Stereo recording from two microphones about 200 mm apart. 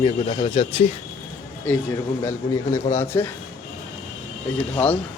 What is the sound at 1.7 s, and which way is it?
Speech, 10° left (ahead or behind).